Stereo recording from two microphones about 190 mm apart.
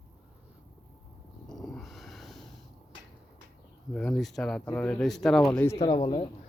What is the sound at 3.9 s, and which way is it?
Speech, 5° left (ahead or behind).